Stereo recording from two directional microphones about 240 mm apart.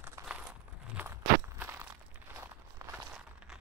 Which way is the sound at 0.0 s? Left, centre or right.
Centre.